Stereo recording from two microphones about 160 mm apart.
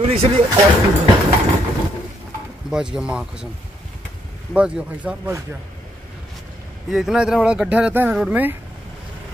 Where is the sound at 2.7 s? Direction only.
5° right (ahead or behind).